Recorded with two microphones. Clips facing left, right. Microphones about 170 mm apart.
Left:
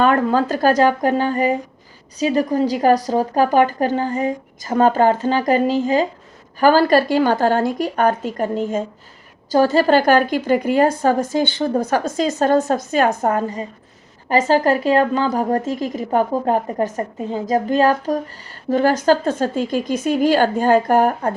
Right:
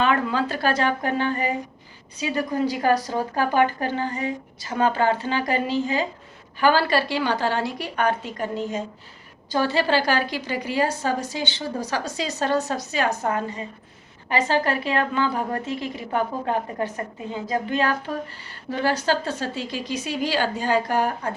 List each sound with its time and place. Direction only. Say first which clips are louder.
0.0 s a woman's voice: left 6 dB; 45° left (ahead or behind)